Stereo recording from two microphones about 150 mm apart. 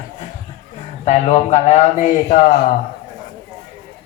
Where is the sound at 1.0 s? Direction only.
50° left (ahead or behind).